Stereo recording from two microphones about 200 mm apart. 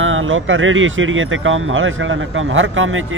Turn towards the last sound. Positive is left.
turn(degrees=-80)